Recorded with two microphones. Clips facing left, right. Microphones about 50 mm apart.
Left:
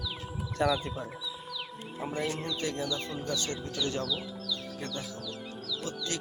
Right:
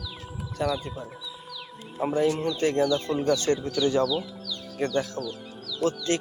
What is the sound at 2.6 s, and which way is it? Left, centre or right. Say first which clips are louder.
Speech: right 13 dB; right.